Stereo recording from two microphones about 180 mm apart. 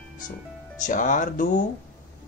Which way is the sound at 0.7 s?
45° left (ahead or behind).